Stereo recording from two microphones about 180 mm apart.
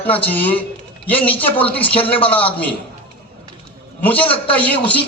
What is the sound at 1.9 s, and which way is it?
Speech, 30° left (ahead or behind).